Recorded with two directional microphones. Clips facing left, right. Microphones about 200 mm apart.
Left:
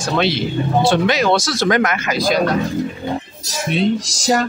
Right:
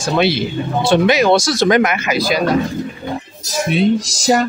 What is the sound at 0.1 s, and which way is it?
Speech, 10° right (ahead or behind).